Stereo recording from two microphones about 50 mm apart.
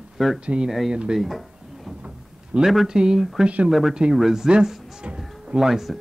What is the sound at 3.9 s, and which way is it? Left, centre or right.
Speech, centre.